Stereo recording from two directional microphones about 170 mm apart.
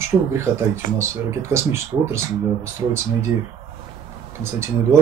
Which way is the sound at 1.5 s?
15° right (ahead or behind).